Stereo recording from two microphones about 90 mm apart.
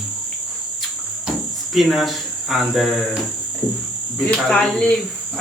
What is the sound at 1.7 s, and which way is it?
Speech, centre (ahead or behind).